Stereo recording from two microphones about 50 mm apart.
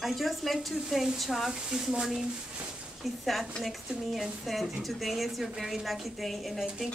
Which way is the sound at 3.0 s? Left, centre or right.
Centre.